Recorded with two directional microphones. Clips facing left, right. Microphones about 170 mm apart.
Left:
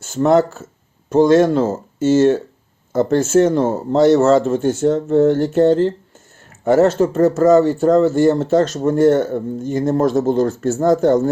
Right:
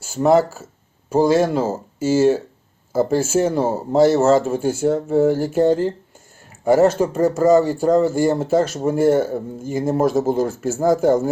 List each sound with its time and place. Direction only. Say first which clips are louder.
0.0 s speech: left 1 dB; 5° right (ahead or behind)
7.3 s speech: left 2 dB; 15° right (ahead or behind)
7.6 s speech: left 3 dB; 5° right (ahead or behind)